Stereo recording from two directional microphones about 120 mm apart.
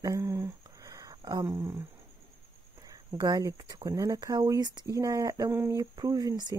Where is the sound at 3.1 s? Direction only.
35° right (ahead or behind).